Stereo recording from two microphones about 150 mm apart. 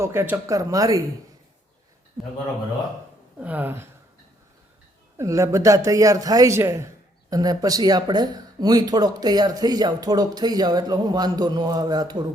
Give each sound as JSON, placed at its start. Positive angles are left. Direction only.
{"t": 0.0, "sound": "a man's voice", "side_deg": -15}
{"t": 3.4, "sound": "speech", "side_deg": -10}
{"t": 5.1, "sound": "a man's voice", "side_deg": -20}